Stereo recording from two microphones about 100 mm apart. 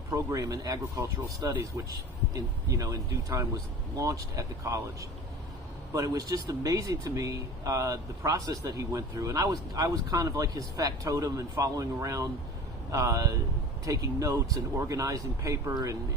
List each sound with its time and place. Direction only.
0.1 s speech: 35° right (ahead or behind)